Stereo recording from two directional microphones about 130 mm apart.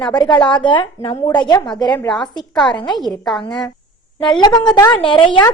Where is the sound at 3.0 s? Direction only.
Centre (ahead or behind).